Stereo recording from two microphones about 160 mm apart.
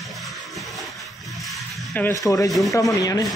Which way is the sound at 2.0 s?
15° left (ahead or behind).